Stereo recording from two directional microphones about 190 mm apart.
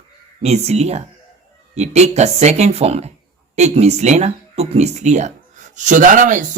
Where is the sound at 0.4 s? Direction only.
35° right (ahead or behind).